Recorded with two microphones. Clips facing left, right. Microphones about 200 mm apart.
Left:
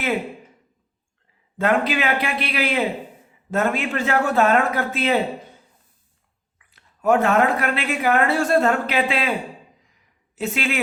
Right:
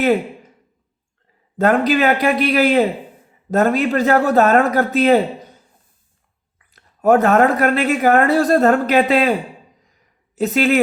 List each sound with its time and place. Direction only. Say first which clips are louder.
1.5 s speech: right 5 dB; 40° right (ahead or behind)
6.6 s speech: right 6 dB; 40° right (ahead or behind)
10.3 s speech: right 9 dB; 40° right (ahead or behind)